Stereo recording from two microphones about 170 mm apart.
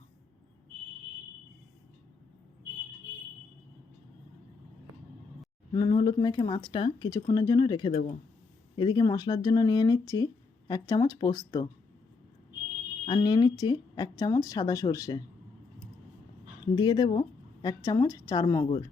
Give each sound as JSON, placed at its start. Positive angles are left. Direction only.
{"t": 5.7, "sound": "speech", "side_deg": 25}
{"t": 13.1, "sound": "speech", "side_deg": 25}
{"t": 16.7, "sound": "speech", "side_deg": 25}